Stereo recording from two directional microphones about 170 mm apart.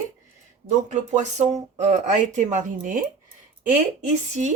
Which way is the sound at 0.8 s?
45° right (ahead or behind).